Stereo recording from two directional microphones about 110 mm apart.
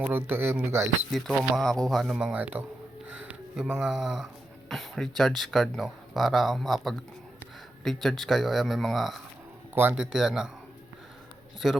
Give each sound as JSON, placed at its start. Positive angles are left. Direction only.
{"t": 0.0, "sound": "speech", "side_deg": -20}
{"t": 1.5, "sound": "speech", "side_deg": 5}
{"t": 2.1, "sound": "speech", "side_deg": -10}
{"t": 11.6, "sound": "speech", "side_deg": 0}